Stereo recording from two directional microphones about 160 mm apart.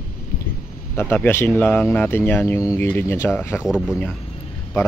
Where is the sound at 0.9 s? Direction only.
15° left (ahead or behind).